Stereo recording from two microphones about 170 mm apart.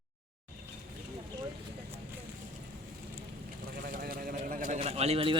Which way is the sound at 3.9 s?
60° right (ahead or behind).